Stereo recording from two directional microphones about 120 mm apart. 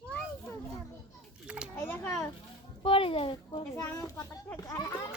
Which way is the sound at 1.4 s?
10° right (ahead or behind).